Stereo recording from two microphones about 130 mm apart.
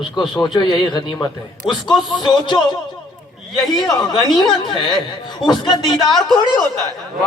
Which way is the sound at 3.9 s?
30° left (ahead or behind).